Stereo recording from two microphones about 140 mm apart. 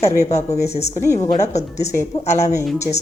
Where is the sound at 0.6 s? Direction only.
50° left (ahead or behind).